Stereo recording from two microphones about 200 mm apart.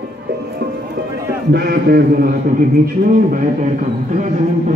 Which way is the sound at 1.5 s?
50° right (ahead or behind).